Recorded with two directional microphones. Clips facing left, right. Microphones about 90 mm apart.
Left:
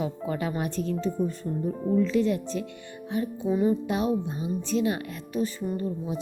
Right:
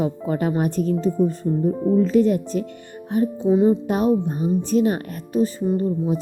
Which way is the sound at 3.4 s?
30° right (ahead or behind).